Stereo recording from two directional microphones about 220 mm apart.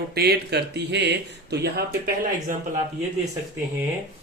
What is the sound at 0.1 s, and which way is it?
Speech, 45° right (ahead or behind).